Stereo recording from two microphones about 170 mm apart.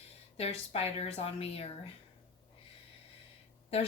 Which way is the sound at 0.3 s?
35° left (ahead or behind).